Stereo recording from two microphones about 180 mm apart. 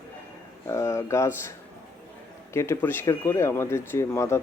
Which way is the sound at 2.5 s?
15° left (ahead or behind).